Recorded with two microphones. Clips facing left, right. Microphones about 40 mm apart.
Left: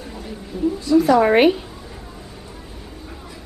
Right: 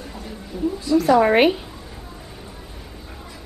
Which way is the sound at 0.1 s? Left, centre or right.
Centre.